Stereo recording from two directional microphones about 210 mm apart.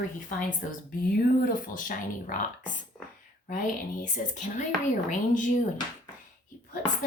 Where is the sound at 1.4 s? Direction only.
40° left (ahead or behind).